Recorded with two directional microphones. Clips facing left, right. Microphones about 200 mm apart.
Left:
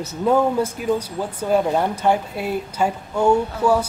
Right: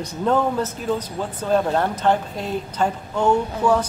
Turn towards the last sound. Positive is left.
turn(degrees=10)  # may be behind; listen again after turning